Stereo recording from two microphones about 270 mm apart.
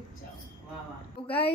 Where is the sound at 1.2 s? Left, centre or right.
Centre.